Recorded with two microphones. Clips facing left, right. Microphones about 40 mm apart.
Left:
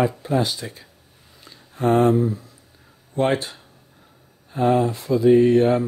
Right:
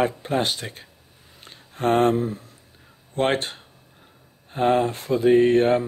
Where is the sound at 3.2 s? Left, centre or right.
Right.